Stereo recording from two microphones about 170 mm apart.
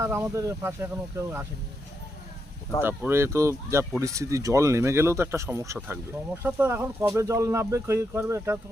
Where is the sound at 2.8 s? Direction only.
15° right (ahead or behind).